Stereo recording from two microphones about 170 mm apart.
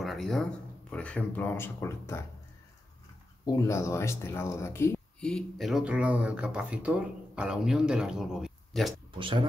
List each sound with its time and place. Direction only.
0.0 s speech: centre (ahead or behind)
3.4 s speech: 20° left (ahead or behind)
5.2 s speech: centre (ahead or behind)
9.2 s speech: 30° right (ahead or behind)